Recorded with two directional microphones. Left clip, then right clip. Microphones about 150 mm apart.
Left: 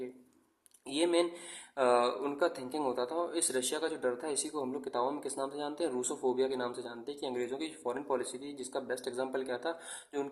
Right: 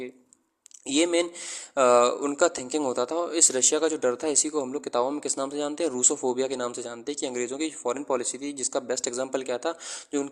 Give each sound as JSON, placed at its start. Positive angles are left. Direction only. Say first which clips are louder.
{"t": 0.9, "sound": "a man's voice", "louder": "right 6 dB", "side_deg": -45}